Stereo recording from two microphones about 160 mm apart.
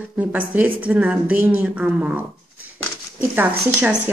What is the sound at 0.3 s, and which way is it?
Speech, 10° right (ahead or behind).